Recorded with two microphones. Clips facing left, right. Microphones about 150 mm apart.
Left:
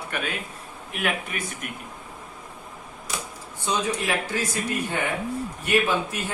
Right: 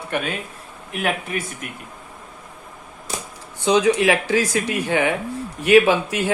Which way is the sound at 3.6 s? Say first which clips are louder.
Right 10 dB; 80° right.